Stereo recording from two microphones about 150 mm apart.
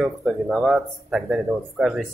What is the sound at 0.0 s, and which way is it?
Speech, centre (ahead or behind).